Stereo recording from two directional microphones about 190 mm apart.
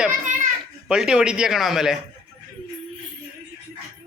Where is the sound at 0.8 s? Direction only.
5° right (ahead or behind).